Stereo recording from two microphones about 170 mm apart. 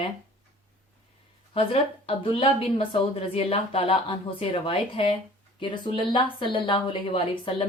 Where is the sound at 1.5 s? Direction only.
30° left (ahead or behind).